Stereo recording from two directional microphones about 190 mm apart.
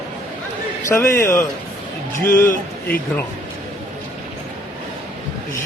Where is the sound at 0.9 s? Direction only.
15° left (ahead or behind).